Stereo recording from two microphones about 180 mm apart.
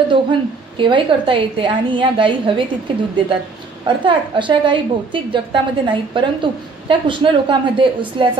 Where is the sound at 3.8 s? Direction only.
25° right (ahead or behind).